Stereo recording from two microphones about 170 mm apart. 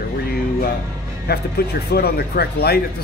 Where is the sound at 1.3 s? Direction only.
75° left (ahead or behind).